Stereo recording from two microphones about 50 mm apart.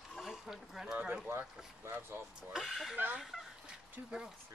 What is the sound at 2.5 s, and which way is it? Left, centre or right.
Speech, centre.